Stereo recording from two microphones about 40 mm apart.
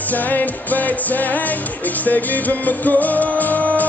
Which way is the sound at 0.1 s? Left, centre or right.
Left.